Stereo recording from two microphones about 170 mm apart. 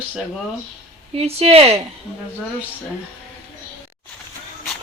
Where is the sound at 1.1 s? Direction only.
35° right (ahead or behind).